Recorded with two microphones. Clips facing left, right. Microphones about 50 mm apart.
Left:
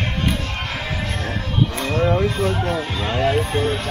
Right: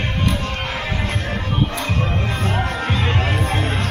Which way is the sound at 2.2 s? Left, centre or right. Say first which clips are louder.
Left 2 dB; right.